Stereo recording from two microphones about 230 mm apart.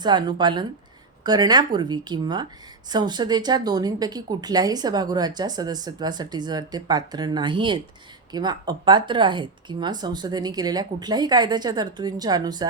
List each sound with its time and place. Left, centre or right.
0.0 s a woman's voice: centre